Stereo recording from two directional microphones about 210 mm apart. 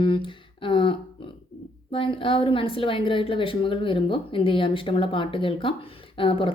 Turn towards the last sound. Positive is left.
turn(degrees=25)  # may be behind; listen again after turning